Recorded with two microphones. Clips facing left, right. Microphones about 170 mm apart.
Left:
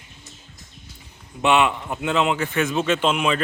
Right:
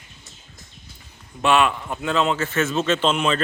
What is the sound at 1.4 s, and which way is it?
A man's voice, 20° left (ahead or behind).